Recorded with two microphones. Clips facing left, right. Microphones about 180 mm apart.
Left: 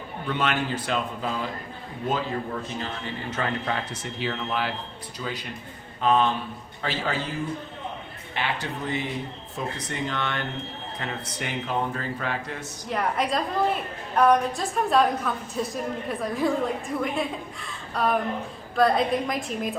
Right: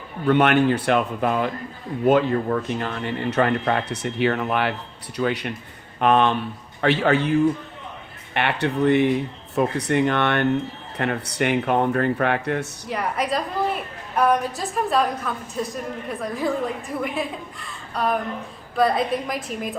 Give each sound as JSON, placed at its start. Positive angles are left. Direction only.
{"t": 0.3, "sound": "a man's voice", "side_deg": -60}
{"t": 12.9, "sound": "a woman's voice", "side_deg": 0}